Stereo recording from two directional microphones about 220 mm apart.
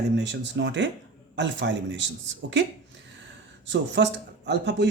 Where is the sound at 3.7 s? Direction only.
50° right (ahead or behind).